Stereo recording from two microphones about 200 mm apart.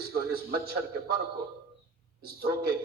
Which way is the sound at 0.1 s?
50° right (ahead or behind).